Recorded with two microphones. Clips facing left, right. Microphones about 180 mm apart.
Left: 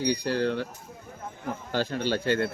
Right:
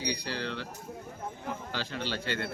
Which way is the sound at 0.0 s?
50° left (ahead or behind).